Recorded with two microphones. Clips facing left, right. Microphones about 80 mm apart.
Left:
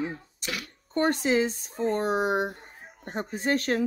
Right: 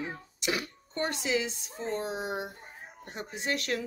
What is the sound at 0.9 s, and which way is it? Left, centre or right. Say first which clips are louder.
Speech: left 7 dB; left.